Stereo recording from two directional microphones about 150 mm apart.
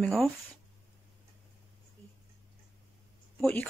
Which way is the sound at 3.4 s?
10° left (ahead or behind).